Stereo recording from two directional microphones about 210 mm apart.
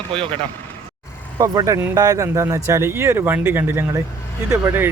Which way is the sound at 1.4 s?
15° right (ahead or behind).